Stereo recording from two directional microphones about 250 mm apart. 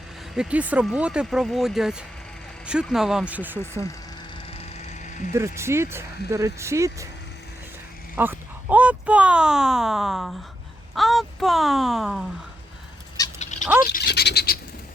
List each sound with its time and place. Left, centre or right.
0.3 s speech: centre
4.5 s a sound: left
5.5 s speech: centre
8.1 s speech: centre
13.4 s bird: left
13.9 s scratch: left